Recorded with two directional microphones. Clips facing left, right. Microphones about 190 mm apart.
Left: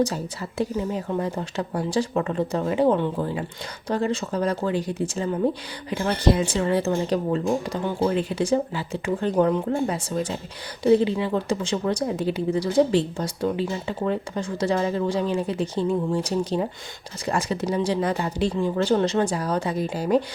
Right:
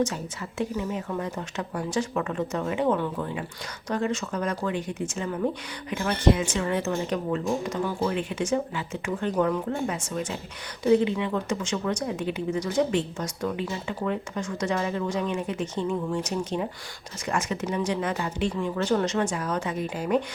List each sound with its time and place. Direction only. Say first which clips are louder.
0.6 s speech: left 3 dB; 35° left (ahead or behind)